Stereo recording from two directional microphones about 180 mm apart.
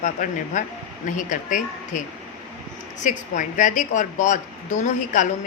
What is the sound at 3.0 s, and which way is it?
A woman's voice, 45° left (ahead or behind).